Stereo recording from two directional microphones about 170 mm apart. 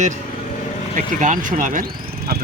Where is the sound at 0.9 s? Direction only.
50° right (ahead or behind).